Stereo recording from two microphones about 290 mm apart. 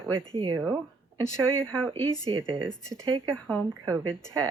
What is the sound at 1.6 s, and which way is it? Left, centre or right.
Speech, centre.